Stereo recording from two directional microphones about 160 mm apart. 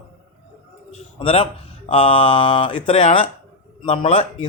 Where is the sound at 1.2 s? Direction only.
35° left (ahead or behind).